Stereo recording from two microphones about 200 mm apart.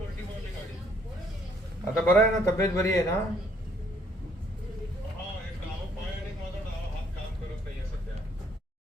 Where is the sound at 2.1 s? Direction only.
15° left (ahead or behind).